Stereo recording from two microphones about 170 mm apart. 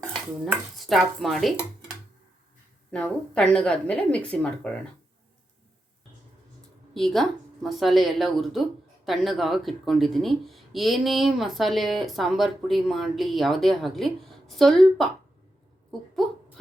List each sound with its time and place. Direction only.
0.4 s speech: 5° right (ahead or behind)
2.9 s speech: 5° left (ahead or behind)
6.9 s speech: centre (ahead or behind)